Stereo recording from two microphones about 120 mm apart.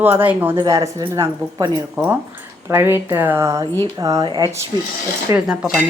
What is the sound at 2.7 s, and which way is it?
A woman's voice, 20° right (ahead or behind).